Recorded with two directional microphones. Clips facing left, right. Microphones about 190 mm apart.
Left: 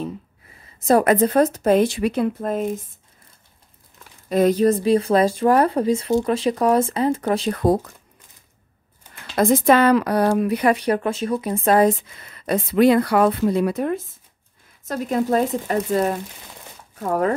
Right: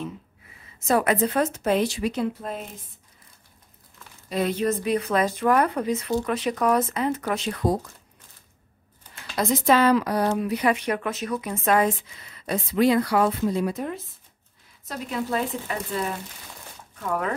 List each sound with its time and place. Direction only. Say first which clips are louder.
0.7 s speech: left 6 dB; 40° left (ahead or behind)
1.8 s speech: left 5 dB; 60° left (ahead or behind)
4.3 s speech: left 8 dB; 45° left (ahead or behind)
7.5 s a woman's voice: left 5 dB; 60° left (ahead or behind)
9.4 s a woman's voice: left 5 dB; 55° left (ahead or behind)
10.7 s speech: left 5 dB; 35° left (ahead or behind)
12.1 s a woman's voice: left 6 dB; 55° left (ahead or behind)
14.9 s speech: left 8 dB; 45° left (ahead or behind)